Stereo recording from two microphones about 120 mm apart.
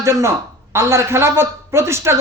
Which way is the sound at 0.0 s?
25° right (ahead or behind).